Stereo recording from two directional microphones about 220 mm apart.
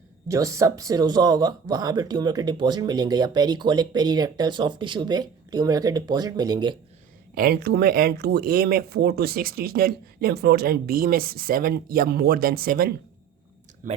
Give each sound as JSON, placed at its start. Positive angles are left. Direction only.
{"t": 0.3, "sound": "speech", "side_deg": -15}
{"t": 7.3, "sound": "speech", "side_deg": -45}